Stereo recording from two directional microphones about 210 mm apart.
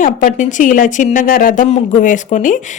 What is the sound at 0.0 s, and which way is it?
Speech, 40° left (ahead or behind).